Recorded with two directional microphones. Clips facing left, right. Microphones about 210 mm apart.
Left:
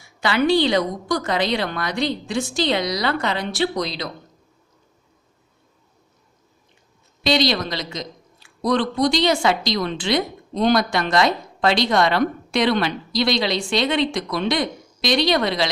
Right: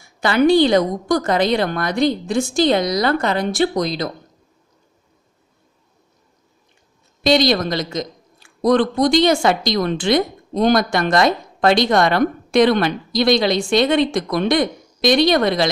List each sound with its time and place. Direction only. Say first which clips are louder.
0.0 s a woman's voice: right 5 dB; 45° right (ahead or behind)
7.2 s a woman's voice: right 4 dB; 50° right (ahead or behind)